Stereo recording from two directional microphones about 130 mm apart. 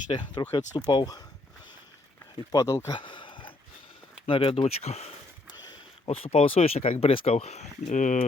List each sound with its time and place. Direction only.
0.4 s speech: 30° left (ahead or behind)
2.5 s speech: 25° left (ahead or behind)
3.0 s a sound: 40° left (ahead or behind)
4.3 s speech: 45° left (ahead or behind)
6.1 s speech: 50° left (ahead or behind); by 8.2 s 70° left (ahead or behind)